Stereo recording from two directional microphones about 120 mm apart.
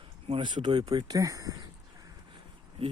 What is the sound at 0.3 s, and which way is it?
Speech, 40° right (ahead or behind).